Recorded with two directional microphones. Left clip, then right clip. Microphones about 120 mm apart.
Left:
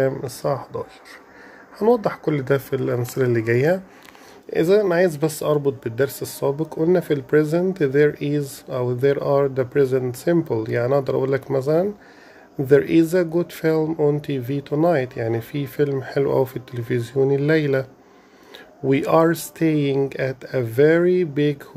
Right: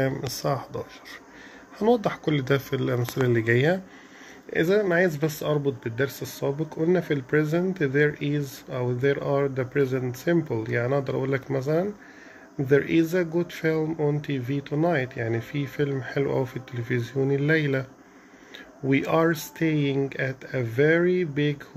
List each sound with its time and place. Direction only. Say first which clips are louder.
0.0 s speech: left 5 dB; 20° left (ahead or behind); by 17.8 s 40° left (ahead or behind)
18.9 s speech: left 6 dB; 40° left (ahead or behind)